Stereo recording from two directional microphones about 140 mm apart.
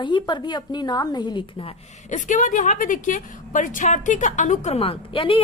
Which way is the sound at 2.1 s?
65° left (ahead or behind).